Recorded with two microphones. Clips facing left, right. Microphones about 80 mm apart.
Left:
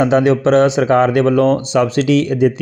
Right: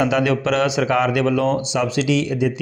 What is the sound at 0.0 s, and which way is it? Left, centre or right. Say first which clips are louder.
A man's voice: left 6 dB; left.